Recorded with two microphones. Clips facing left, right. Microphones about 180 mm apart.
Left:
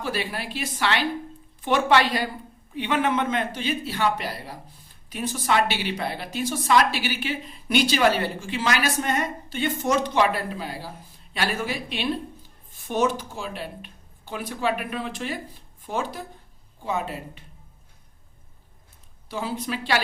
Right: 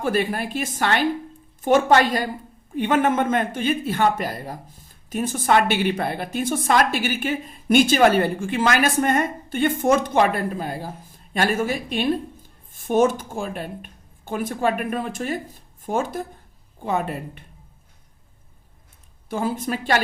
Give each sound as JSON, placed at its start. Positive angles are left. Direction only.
{"t": 0.0, "sound": "a woman's voice", "side_deg": -50}
{"t": 19.3, "sound": "speech", "side_deg": -50}